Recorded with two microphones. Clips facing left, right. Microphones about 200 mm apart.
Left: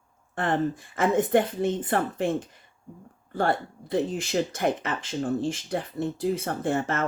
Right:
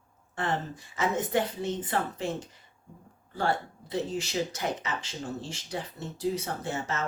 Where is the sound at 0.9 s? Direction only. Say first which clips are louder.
Left 6 dB; 55° left (ahead or behind).